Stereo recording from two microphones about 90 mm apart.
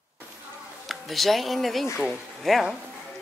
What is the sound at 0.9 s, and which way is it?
Speech, centre (ahead or behind).